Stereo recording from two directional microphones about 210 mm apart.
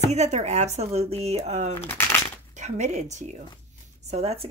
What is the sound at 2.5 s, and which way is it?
Speech, 35° right (ahead or behind).